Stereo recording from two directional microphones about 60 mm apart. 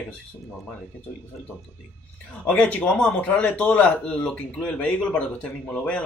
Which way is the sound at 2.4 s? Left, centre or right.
Left.